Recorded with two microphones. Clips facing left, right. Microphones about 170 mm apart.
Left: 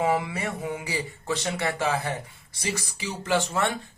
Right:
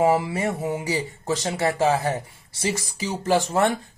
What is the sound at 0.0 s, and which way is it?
Speech, 35° right (ahead or behind).